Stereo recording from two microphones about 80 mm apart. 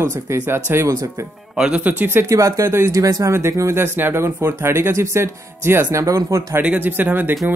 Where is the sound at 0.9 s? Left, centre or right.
Right.